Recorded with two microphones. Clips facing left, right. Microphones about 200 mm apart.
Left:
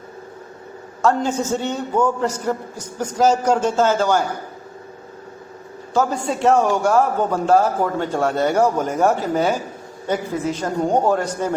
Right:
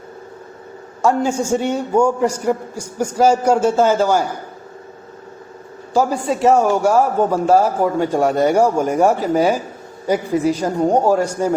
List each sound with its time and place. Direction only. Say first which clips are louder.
1.0 s a man's voice: right 2 dB; 10° right (ahead or behind)
5.9 s a man's voice: right 3 dB; 10° right (ahead or behind)